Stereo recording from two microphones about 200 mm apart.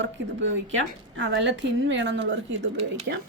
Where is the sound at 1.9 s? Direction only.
60° right (ahead or behind).